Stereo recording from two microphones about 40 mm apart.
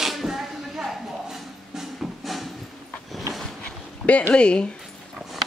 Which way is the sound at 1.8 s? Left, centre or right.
Centre.